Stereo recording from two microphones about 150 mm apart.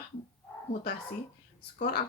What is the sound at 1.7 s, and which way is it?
Speech, 75° left (ahead or behind).